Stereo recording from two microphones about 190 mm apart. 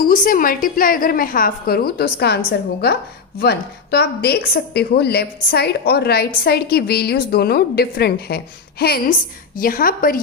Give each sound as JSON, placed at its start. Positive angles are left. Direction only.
{"t": 0.1, "sound": "a woman's voice", "side_deg": 50}